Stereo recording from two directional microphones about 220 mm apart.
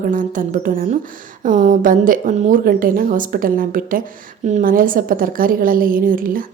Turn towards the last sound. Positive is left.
turn(degrees=-40)  # may be behind; listen again after turning